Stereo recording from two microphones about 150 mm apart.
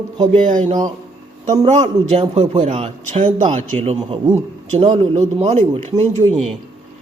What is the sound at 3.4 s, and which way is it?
Speech, 60° right (ahead or behind).